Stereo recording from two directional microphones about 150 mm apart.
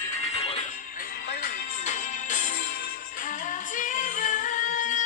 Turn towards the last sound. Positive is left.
turn(degrees=60)  # may be behind; listen again after turning